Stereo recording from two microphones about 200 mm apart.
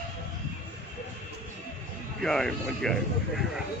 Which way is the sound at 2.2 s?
Centre (ahead or behind).